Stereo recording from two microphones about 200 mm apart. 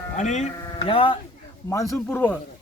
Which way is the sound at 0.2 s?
35° left (ahead or behind).